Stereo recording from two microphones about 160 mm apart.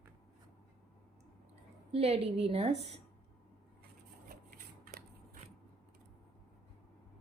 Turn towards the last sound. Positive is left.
turn(degrees=-65)  # may be behind; listen again after turning